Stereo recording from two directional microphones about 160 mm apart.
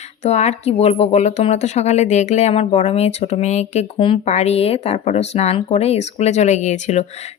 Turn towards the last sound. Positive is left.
turn(degrees=45)  # may be behind; listen again after turning